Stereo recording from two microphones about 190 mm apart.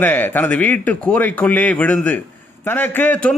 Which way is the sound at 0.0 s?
10° left (ahead or behind).